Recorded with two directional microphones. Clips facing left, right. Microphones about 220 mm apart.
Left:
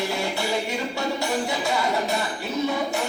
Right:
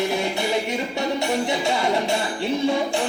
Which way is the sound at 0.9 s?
25° right (ahead or behind).